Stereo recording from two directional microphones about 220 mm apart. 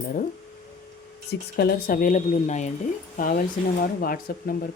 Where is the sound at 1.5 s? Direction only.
45° left (ahead or behind).